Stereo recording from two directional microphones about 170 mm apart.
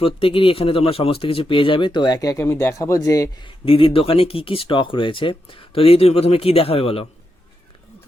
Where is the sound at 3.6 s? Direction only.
30° left (ahead or behind).